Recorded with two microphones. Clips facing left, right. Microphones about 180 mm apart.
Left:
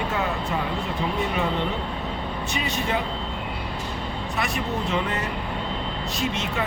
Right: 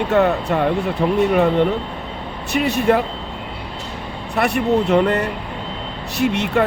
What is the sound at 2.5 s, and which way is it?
Speech, 65° right (ahead or behind).